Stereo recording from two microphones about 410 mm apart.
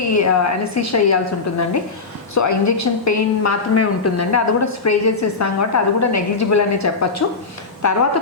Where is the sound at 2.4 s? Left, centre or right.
Left.